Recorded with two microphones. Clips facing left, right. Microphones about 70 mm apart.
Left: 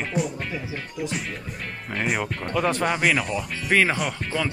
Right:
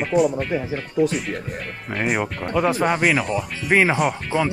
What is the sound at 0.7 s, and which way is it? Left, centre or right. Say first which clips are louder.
Speech: right 10 dB; right.